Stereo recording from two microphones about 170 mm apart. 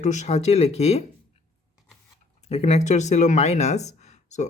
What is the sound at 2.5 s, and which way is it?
Speech, 40° left (ahead or behind).